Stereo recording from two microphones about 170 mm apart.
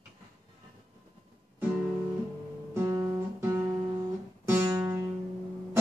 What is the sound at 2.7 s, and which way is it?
Guitar, 20° right (ahead or behind).